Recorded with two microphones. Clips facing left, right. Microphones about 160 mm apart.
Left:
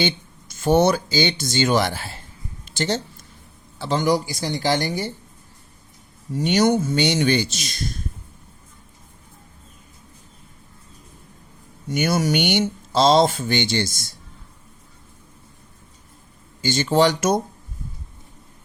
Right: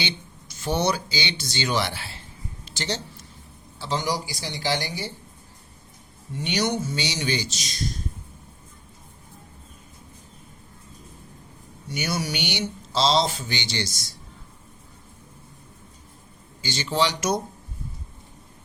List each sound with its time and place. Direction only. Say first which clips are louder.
0.0 s speech: left 8 dB; 50° left (ahead or behind)
2.6 s a sound: left 7 dB; 50° left (ahead or behind)
3.8 s speech: left 7 dB; 55° left (ahead or behind)
6.3 s speech: left 8 dB; 45° left (ahead or behind)
11.9 s speech: left 8 dB; 50° left (ahead or behind)
16.6 s speech: left 7 dB; 50° left (ahead or behind)